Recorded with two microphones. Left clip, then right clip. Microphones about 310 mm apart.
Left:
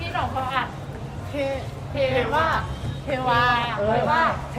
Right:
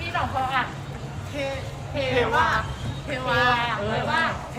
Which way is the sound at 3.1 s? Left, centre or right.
Left.